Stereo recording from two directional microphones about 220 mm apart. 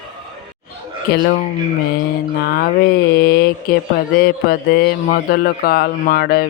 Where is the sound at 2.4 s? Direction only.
45° left (ahead or behind).